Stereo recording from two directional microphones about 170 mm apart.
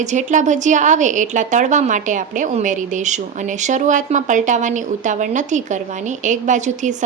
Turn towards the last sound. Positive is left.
turn(degrees=-45)  # may be behind; listen again after turning